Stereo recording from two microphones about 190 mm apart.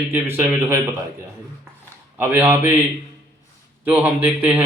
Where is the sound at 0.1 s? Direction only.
10° right (ahead or behind).